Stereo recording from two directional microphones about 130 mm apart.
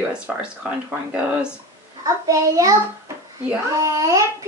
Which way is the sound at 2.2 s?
25° right (ahead or behind).